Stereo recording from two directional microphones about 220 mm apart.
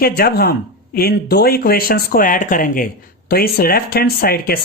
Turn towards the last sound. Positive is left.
turn(degrees=45)  # may be behind; listen again after turning